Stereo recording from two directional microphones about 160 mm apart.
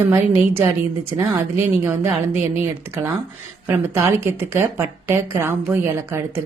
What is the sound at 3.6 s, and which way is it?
A woman's voice, 15° right (ahead or behind).